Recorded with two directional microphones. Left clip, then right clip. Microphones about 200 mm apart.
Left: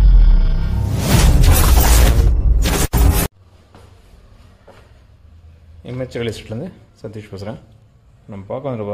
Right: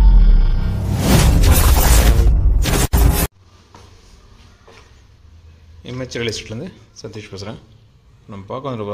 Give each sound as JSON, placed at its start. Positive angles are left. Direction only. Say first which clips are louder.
{"t": 0.0, "sound": "music", "louder": "right 1 dB", "side_deg": 0}
{"t": 5.9, "sound": "speech", "louder": "even", "side_deg": 10}